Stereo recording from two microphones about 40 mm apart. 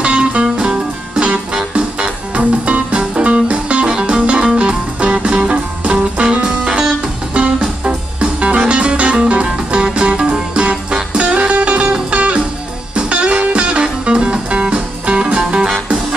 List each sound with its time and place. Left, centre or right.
0.0 s music: right